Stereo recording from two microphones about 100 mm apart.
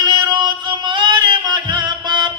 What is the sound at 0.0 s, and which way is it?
Music, 50° right (ahead or behind).